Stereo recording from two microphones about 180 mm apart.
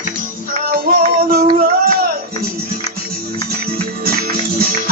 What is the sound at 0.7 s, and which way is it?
Music, 55° right (ahead or behind).